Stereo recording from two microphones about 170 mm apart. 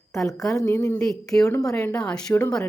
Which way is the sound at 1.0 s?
5° left (ahead or behind).